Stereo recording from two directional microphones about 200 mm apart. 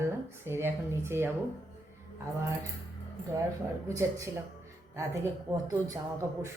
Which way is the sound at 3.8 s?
15° right (ahead or behind).